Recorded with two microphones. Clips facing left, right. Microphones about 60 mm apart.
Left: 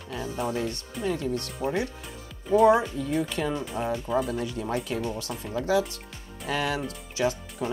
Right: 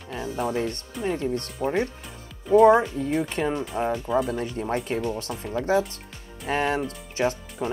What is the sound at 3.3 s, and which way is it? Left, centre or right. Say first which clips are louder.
Speech: right 3 dB; right.